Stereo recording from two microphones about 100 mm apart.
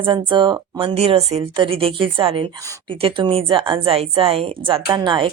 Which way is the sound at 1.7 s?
70° right (ahead or behind).